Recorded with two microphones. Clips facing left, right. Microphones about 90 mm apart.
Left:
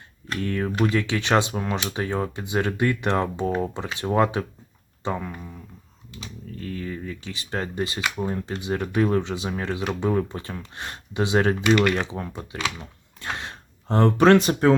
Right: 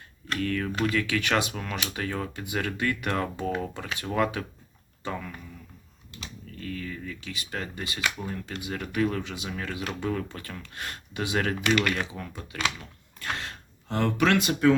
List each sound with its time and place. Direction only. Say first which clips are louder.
0.3 s speech: left 3 dB; 30° left (ahead or behind)
6.6 s speech: left 4 dB; 30° left (ahead or behind)
12.8 s a sound: left 2 dB; 20° left (ahead or behind)
13.8 s speech: left 7 dB; 35° left (ahead or behind)